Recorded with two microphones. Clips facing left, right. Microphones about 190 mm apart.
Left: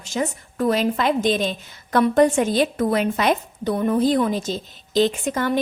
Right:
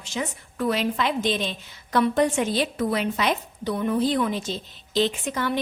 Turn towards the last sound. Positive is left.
turn(degrees=45)  # may be behind; listen again after turning